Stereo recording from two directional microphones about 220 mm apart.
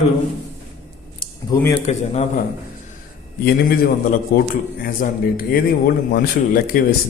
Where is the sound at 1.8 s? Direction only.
30° left (ahead or behind).